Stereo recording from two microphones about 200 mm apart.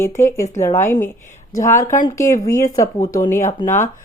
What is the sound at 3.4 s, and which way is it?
Speech, 40° left (ahead or behind).